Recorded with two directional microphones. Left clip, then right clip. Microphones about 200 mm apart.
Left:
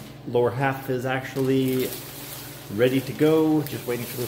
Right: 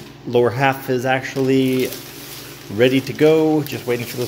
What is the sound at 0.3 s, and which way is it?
Speech, 45° right (ahead or behind).